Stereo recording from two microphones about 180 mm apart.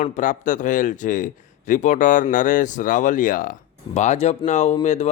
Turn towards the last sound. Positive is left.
turn(degrees=40)  # may be behind; listen again after turning